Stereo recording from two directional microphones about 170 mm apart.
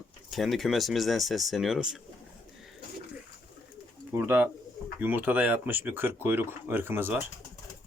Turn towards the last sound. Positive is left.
turn(degrees=-15)  # may be behind; listen again after turning